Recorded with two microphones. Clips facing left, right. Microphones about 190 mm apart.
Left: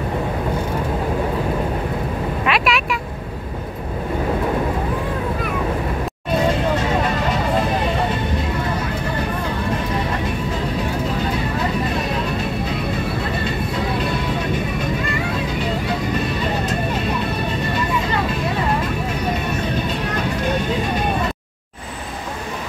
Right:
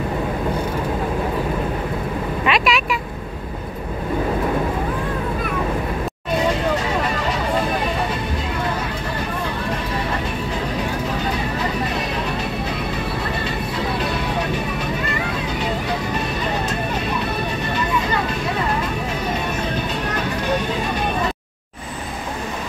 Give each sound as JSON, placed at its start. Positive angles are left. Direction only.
{"t": 2.4, "sound": "vehicle", "side_deg": 0}